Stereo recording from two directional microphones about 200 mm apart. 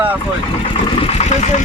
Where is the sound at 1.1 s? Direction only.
30° left (ahead or behind).